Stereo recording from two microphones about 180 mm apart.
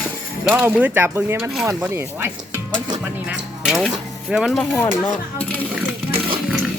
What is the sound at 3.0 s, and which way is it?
Speech, 5° right (ahead or behind).